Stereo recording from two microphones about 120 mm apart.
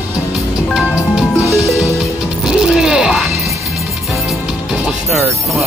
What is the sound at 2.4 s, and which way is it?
Music, 5° right (ahead or behind).